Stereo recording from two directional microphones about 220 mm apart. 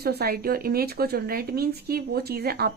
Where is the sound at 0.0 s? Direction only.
45° right (ahead or behind).